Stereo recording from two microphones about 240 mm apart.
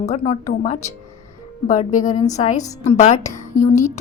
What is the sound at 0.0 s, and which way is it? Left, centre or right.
A woman's voice, left.